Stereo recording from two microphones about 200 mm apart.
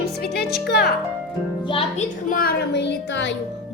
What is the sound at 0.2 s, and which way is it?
Music, 50° left (ahead or behind).